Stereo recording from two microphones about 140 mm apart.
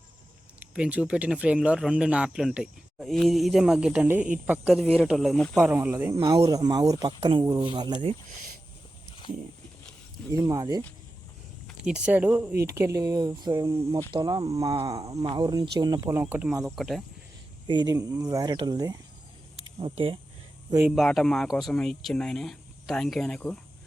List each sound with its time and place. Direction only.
0.6 s speech: 10° right (ahead or behind)
5.6 s speech: 15° right (ahead or behind)
6.1 s speech: 35° right (ahead or behind)
10.4 s speech: 25° right (ahead or behind)
11.8 s speech: 5° right (ahead or behind); by 16.2 s 25° right (ahead or behind)
16.2 s speech: 10° right (ahead or behind)
17.7 s speech: 30° right (ahead or behind)
19.6 s speech: 40° right (ahead or behind)
20.9 s speech: centre (ahead or behind)